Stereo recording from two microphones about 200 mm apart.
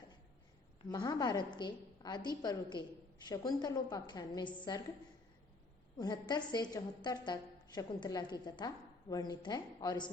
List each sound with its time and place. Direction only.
0.9 s a woman's voice: 20° left (ahead or behind)
6.0 s a woman's voice: 20° left (ahead or behind)